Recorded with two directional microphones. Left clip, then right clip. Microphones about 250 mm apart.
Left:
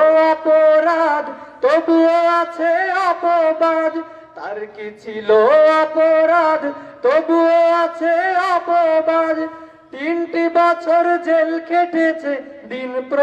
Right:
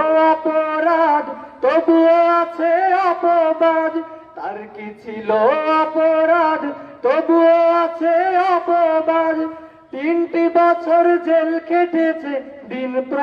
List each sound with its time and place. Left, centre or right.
0.0 s music: left
5.2 s music: left